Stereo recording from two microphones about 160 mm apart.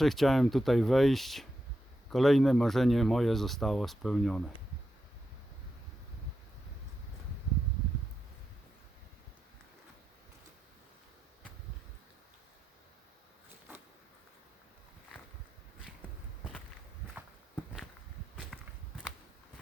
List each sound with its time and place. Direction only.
0.0 s speech: centre (ahead or behind)
16.4 s walk: centre (ahead or behind)
18.5 s walk: centre (ahead or behind)